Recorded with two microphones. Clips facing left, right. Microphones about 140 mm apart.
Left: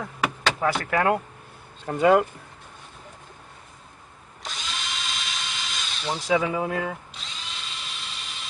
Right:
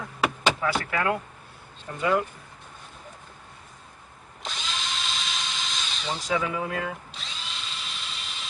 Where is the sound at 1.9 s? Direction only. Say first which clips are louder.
Left 7 dB; 65° left (ahead or behind).